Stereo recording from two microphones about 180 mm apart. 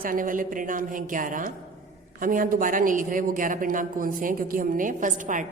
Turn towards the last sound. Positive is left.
turn(degrees=-45)  # may be behind; listen again after turning